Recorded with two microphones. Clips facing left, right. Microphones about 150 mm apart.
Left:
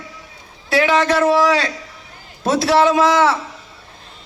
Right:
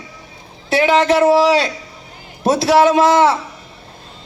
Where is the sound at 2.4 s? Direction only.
15° right (ahead or behind).